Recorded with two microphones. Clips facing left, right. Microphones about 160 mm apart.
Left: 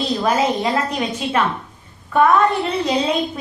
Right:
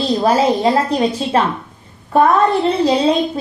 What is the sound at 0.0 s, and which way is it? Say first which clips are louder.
A woman's voice: right 4 dB; 30° right (ahead or behind).